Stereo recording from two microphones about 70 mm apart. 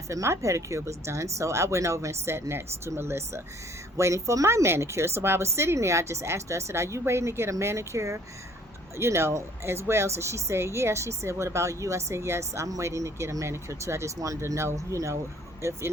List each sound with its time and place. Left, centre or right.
0.1 s speech: right